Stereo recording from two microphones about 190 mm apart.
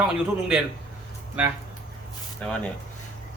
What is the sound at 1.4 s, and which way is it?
Speech, 10° right (ahead or behind).